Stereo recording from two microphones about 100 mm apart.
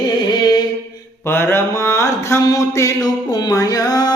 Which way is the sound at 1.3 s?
20° left (ahead or behind).